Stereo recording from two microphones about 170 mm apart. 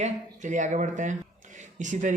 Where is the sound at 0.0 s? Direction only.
45° right (ahead or behind).